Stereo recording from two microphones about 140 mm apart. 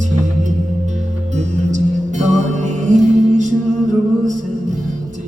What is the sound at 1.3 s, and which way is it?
Music, 60° right (ahead or behind).